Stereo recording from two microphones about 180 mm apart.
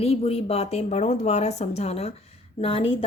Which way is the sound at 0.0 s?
35° left (ahead or behind).